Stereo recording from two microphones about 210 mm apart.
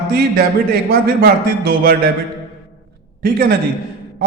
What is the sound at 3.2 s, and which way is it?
Speech, 45° right (ahead or behind).